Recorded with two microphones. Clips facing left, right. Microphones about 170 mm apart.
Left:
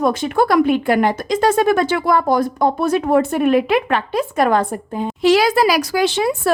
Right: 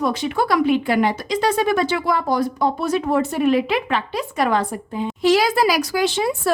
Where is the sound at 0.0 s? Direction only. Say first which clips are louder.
Left 4 dB; 50° left (ahead or behind).